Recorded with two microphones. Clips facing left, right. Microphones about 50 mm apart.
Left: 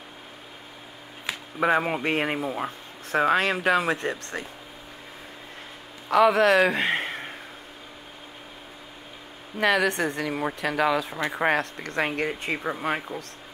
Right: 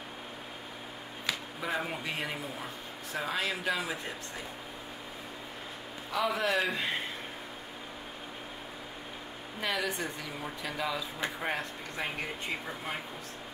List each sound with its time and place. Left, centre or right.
1.6 s speech: left
6.0 s a man's voice: left
9.6 s speech: left